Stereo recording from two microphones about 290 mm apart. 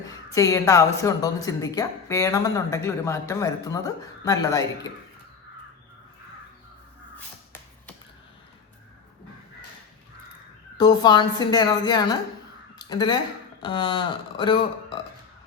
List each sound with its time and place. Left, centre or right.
0.1 s speech: centre
10.8 s speech: centre